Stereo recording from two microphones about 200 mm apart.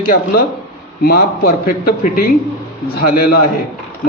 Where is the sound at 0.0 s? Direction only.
45° left (ahead or behind).